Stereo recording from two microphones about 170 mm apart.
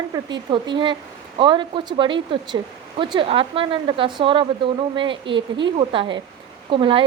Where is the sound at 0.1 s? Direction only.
25° right (ahead or behind).